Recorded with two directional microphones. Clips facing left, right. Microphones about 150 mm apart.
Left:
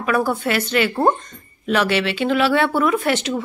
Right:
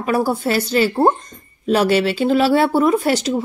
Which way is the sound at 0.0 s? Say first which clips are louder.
Right 2 dB; 35° right (ahead or behind).